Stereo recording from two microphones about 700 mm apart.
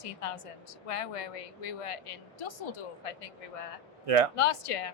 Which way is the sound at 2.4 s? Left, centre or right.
Left.